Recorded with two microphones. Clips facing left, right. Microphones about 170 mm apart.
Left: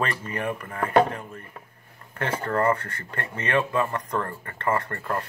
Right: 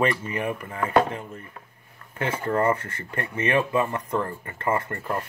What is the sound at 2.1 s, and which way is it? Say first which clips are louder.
Speech: right 1 dB; 10° right (ahead or behind).